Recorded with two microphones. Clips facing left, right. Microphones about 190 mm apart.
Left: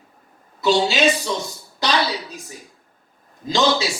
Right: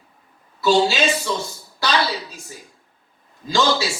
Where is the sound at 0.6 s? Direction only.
20° left (ahead or behind).